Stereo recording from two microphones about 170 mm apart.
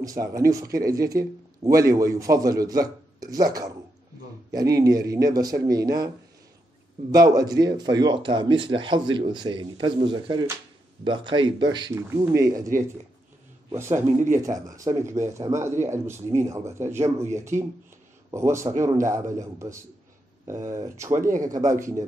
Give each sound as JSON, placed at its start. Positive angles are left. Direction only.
{"t": 0.0, "sound": "speech", "side_deg": -20}
{"t": 7.1, "sound": "speech", "side_deg": -20}